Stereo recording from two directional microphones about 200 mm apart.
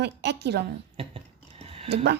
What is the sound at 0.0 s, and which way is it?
Speech, 60° right (ahead or behind).